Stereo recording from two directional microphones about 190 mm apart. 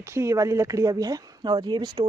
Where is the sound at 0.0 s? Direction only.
15° right (ahead or behind).